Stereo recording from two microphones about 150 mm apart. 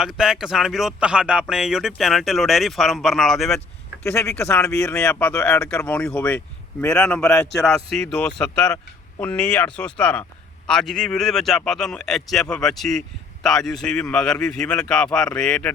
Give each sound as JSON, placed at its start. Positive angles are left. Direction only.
{"t": 0.0, "sound": "speech", "side_deg": 0}
{"t": 4.1, "sound": "speech", "side_deg": 10}